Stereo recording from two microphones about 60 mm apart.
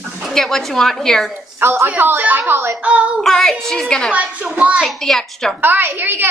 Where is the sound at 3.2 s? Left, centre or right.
Centre.